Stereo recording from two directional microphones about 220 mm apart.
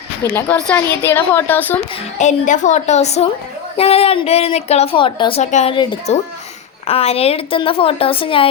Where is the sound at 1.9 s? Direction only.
30° left (ahead or behind).